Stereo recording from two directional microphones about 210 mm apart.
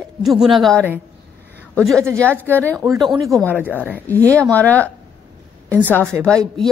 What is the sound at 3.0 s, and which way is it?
Speech, 20° right (ahead or behind).